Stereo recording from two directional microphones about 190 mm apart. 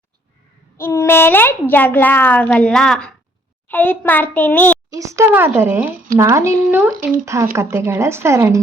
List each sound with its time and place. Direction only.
0.8 s a child's voice: 15° left (ahead or behind)
4.9 s speech: 15° right (ahead or behind)